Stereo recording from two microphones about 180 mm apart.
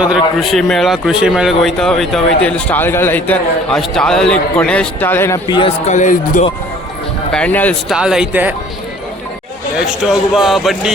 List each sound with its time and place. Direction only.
0.3 s speech: centre (ahead or behind)
5.9 s speech: 45° left (ahead or behind)
7.3 s speech: 10° left (ahead or behind)
7.9 s speech: 5° right (ahead or behind)
10.1 s speech: centre (ahead or behind)